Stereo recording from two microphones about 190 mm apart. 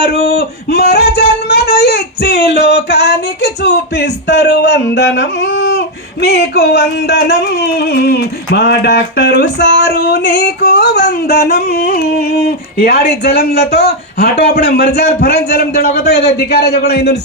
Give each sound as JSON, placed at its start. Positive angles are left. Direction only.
{"t": 0.0, "sound": "speech", "side_deg": 55}
{"t": 10.6, "sound": "music", "side_deg": 60}